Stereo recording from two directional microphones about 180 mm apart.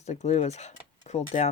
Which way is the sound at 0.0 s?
40° left (ahead or behind).